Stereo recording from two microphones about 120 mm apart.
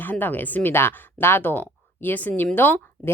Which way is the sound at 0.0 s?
15° left (ahead or behind).